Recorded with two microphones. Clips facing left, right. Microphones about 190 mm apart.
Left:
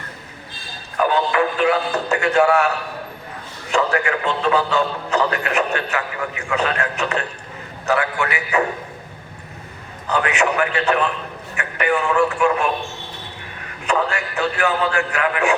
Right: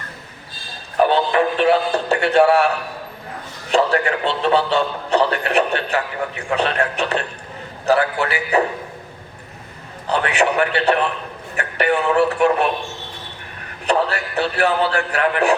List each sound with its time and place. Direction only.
0.9 s a man's voice: 30° right (ahead or behind)
3.7 s a man's voice: 35° right (ahead or behind)
10.1 s a man's voice: 35° right (ahead or behind)
13.8 s a man's voice: 35° right (ahead or behind)